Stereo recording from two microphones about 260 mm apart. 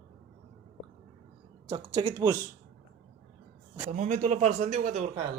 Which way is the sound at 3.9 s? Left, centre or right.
Right.